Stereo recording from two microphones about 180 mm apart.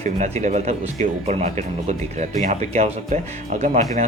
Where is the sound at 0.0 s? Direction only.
40° right (ahead or behind).